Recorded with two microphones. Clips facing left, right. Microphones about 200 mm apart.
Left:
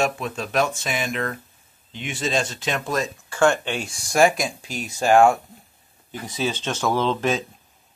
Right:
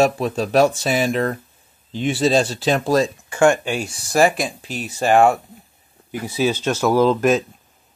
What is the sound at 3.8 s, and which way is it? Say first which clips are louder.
Speech: right 4 dB; 35° right (ahead or behind).